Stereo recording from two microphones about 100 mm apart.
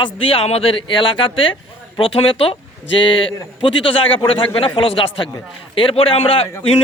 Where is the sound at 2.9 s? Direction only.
55° left (ahead or behind).